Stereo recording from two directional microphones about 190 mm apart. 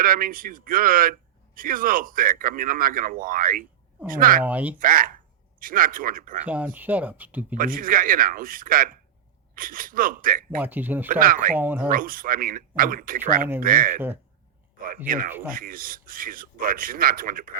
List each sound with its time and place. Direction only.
0.0 s speech: 50° right (ahead or behind)
4.4 s speech: 10° right (ahead or behind)
4.8 s speech: 45° right (ahead or behind)
6.4 s speech: 10° right (ahead or behind)
7.5 s speech: 45° right (ahead or behind)
10.6 s speech: 10° right (ahead or behind)
11.1 s speech: 50° right (ahead or behind)
11.5 s speech: 10° right (ahead or behind)
11.9 s speech: 45° right (ahead or behind)
15.0 s speech: 45° right (ahead or behind)